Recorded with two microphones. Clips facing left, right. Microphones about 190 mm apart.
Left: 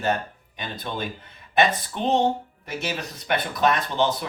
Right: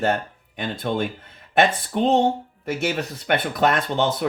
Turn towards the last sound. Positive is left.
turn(degrees=-55)  # may be behind; listen again after turning